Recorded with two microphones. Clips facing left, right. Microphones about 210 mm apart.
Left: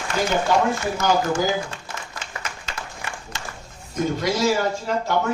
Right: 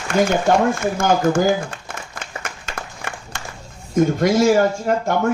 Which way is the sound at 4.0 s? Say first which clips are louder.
Right 7 dB; 50° right (ahead or behind).